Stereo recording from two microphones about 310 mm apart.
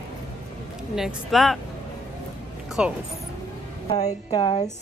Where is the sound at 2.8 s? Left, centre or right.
Centre.